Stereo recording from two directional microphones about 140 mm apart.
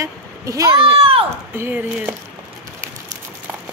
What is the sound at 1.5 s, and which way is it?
Speech, 15° right (ahead or behind).